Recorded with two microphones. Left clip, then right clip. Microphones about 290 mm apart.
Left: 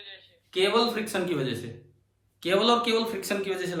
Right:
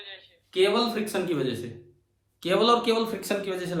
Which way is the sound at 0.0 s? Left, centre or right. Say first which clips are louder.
Right 2 dB; centre.